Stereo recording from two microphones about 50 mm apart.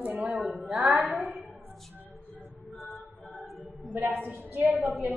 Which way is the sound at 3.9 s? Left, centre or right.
Right.